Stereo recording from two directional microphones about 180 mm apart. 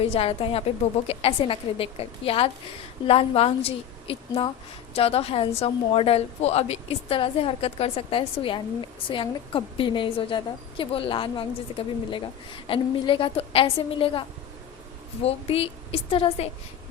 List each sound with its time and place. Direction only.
0.0 s a woman's voice: 35° left (ahead or behind)